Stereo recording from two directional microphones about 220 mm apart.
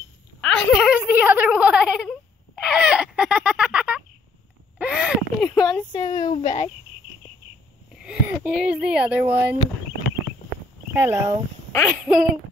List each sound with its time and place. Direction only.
0.4 s a sound: centre (ahead or behind)
0.9 s wail: 10° right (ahead or behind)
4.7 s a sound: 5° right (ahead or behind)
5.5 s a sound: 15° left (ahead or behind)
5.9 s a woman's voice: 15° left (ahead or behind)
6.4 s a child's voice: 30° left (ahead or behind)
8.0 s speech: 5° right (ahead or behind)
10.9 s speech: 10° right (ahead or behind)
12.0 s speech: centre (ahead or behind)